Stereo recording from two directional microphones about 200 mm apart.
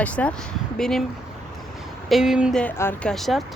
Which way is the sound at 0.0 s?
5° left (ahead or behind).